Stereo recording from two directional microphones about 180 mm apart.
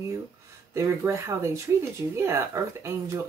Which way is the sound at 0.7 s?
15° right (ahead or behind).